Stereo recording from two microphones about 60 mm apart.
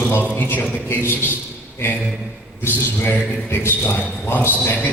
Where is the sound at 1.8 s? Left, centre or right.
Left.